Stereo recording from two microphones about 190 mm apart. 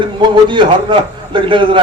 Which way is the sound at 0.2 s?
25° right (ahead or behind).